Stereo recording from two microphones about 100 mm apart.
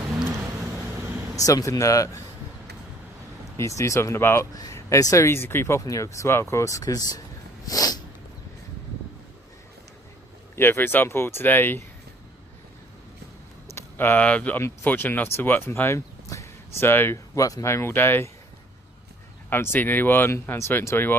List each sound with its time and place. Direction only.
1.4 s speech: 35° left (ahead or behind)
3.6 s speech: 30° left (ahead or behind)
7.7 s snort: 40° left (ahead or behind)
10.5 s speech: 25° left (ahead or behind)
13.7 s speech: 20° left (ahead or behind)
19.5 s speech: 20° left (ahead or behind)